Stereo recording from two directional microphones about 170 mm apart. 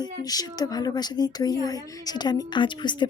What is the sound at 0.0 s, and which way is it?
Speech, 20° left (ahead or behind).